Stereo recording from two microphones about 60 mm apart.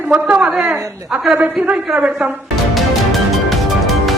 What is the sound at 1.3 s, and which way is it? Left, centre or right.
Speech, right.